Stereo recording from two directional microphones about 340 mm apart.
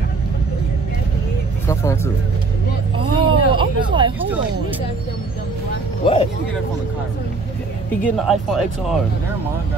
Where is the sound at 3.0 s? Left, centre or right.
Centre.